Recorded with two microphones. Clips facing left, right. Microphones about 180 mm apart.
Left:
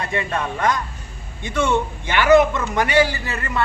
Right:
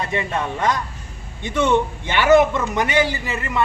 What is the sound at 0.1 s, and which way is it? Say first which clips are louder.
A man's voice: even; 20° right (ahead or behind).